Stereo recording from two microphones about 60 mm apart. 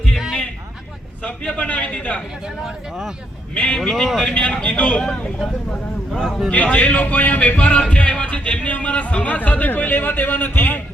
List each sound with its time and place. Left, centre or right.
1.2 s music: left
2.6 s speech: centre
3.5 s music: centre
3.8 s speech: centre
4.2 s music: centre
6.5 s music: left